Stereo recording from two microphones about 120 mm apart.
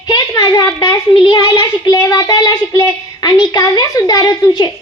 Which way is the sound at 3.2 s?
35° left (ahead or behind).